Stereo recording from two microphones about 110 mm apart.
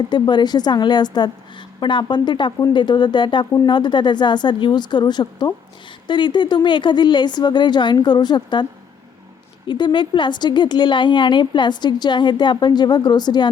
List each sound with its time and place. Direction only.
0.1 s a woman's voice: 45° left (ahead or behind)
9.6 s a woman's voice: 45° left (ahead or behind)